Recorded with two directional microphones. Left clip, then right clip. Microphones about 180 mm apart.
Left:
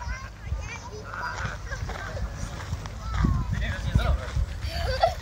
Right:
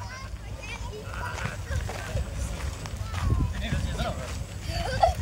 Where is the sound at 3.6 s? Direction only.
20° left (ahead or behind).